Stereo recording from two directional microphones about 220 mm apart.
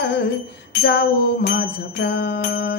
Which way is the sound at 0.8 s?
45° left (ahead or behind).